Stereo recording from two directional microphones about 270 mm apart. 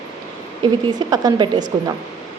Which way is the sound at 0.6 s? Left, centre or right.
Centre.